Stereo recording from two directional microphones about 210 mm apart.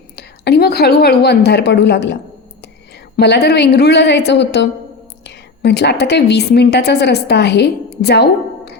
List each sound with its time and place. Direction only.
0.2 s a woman's voice: 50° left (ahead or behind)